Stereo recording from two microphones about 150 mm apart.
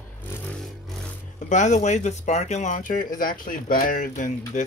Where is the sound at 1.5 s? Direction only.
55° left (ahead or behind).